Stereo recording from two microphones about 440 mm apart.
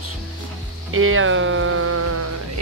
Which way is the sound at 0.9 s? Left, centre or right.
Right.